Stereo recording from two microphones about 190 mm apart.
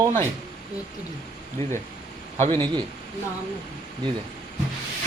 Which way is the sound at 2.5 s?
25° right (ahead or behind).